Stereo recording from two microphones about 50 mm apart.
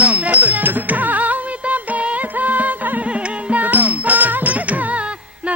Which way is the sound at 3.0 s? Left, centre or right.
Right.